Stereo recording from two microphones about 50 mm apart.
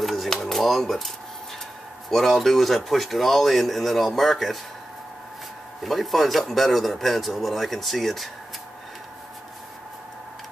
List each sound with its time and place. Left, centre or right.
0.0 s a sound: centre
2.0 s speech: centre
5.9 s speech: centre